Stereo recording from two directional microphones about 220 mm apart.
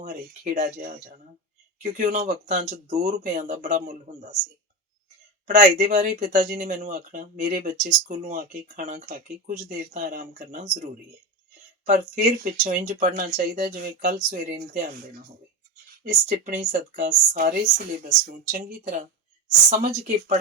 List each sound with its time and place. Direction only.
0.0 s speech: 40° right (ahead or behind)
5.5 s speech: 35° right (ahead or behind)
11.9 s speech: 35° right (ahead or behind)